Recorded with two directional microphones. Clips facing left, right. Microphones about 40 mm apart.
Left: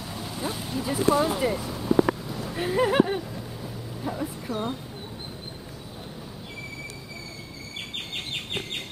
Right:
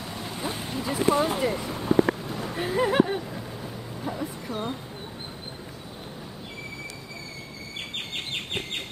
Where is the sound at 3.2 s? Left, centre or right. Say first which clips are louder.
Right 1 dB; centre.